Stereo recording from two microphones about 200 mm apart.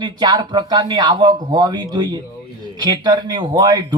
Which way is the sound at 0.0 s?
20° right (ahead or behind).